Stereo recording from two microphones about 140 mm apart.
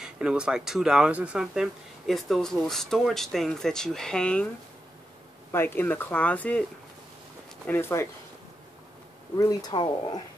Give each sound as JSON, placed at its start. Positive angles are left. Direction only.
{"t": 0.0, "sound": "speech", "side_deg": -5}
{"t": 5.5, "sound": "speech", "side_deg": 15}
{"t": 7.6, "sound": "speech", "side_deg": 15}
{"t": 9.4, "sound": "speech", "side_deg": 30}